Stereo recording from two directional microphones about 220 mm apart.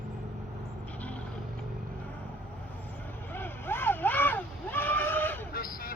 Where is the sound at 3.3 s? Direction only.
10° left (ahead or behind).